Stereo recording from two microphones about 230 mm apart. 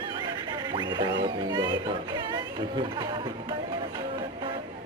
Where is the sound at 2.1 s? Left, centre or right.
Centre.